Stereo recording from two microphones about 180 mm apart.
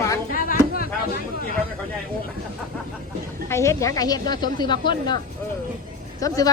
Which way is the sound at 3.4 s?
15° left (ahead or behind).